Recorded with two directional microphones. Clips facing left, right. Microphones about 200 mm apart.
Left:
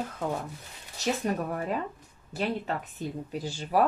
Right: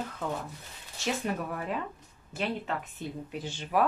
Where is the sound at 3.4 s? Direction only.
35° left (ahead or behind).